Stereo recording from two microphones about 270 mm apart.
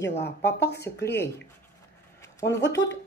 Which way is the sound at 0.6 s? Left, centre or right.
Left.